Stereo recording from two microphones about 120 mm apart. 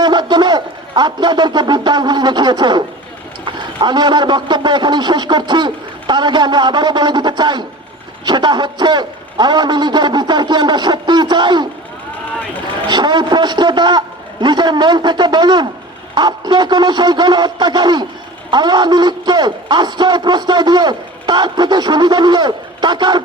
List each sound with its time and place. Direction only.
0.0 s a man's voice: 35° right (ahead or behind)
12.9 s a man's voice: 35° right (ahead or behind)